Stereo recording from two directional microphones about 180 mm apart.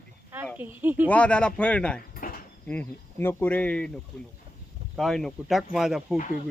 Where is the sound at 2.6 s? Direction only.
10° left (ahead or behind).